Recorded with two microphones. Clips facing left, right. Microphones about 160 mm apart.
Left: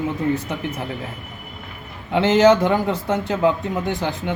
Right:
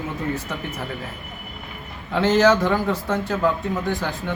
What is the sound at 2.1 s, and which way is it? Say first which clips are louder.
A man's voice: left 3 dB; 20° left (ahead or behind).